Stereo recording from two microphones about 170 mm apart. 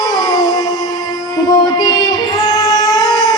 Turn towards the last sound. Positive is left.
turn(degrees=25)  # may be behind; listen again after turning